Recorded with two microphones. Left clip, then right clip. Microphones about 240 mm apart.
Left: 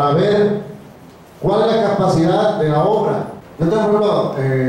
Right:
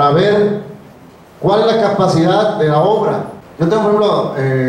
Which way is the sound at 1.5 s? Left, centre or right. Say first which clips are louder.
Right 3 dB; centre.